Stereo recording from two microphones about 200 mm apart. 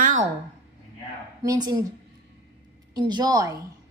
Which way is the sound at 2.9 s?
20° right (ahead or behind).